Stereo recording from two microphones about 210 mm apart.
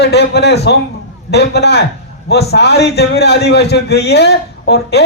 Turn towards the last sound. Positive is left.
turn(degrees=50)  # may be behind; listen again after turning